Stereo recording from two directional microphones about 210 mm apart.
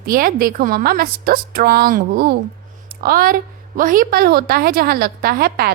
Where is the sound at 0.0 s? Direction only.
45° right (ahead or behind).